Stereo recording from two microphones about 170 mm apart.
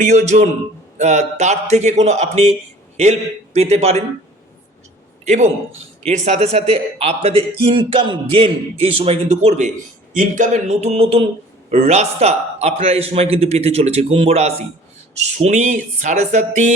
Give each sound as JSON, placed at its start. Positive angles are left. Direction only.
{"t": 0.0, "sound": "speech", "side_deg": -45}
{"t": 5.2, "sound": "a man's voice", "side_deg": -45}